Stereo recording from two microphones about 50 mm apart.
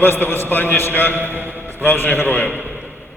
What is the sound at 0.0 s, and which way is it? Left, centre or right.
A man's voice, left.